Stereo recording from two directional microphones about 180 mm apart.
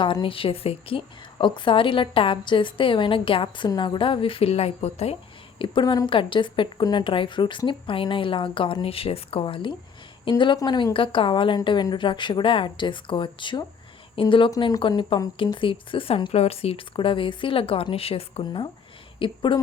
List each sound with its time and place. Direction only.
0.0 s a woman's voice: 25° left (ahead or behind)